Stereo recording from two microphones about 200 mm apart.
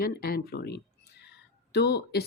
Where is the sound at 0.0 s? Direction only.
50° left (ahead or behind).